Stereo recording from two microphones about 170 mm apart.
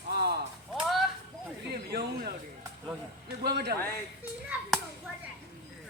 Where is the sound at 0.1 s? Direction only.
70° right (ahead or behind).